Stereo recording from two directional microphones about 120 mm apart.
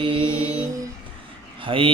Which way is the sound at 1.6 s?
50° right (ahead or behind).